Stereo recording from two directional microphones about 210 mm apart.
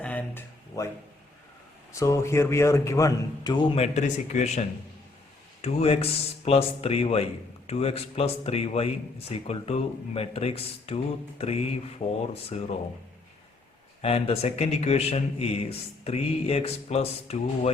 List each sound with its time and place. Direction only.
0.0 s a sound: 5° left (ahead or behind)
1.9 s a man's voice: 15° left (ahead or behind)
3.8 s speech: 35° left (ahead or behind)
5.6 s a man's voice: 30° left (ahead or behind)
14.0 s a man's voice: 30° left (ahead or behind)